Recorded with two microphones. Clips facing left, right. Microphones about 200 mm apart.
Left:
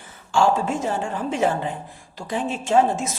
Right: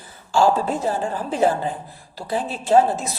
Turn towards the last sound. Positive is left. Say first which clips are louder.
# right 2 dB
turn(degrees=-35)  # may be behind; listen again after turning